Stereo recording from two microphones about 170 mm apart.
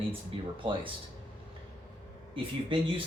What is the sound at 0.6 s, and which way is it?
Speech, 30° right (ahead or behind).